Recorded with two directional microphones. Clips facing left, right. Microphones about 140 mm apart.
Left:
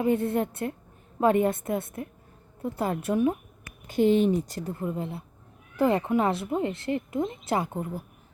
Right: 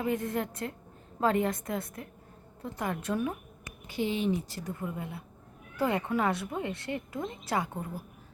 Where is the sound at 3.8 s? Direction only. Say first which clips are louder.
Left 9 dB; 50° left (ahead or behind).